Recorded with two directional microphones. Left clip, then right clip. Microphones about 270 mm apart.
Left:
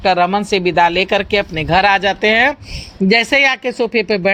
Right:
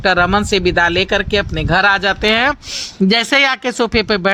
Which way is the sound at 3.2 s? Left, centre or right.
Right.